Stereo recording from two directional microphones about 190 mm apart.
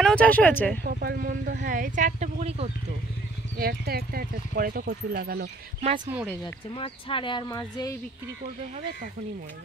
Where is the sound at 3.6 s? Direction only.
55° right (ahead or behind).